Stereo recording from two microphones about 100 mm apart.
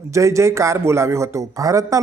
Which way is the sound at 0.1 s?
30° right (ahead or behind).